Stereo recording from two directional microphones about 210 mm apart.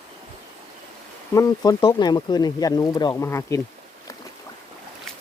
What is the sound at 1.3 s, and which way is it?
Speech, 15° left (ahead or behind).